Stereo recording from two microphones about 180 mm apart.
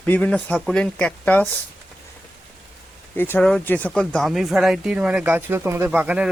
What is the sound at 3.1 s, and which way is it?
Speech, 10° left (ahead or behind).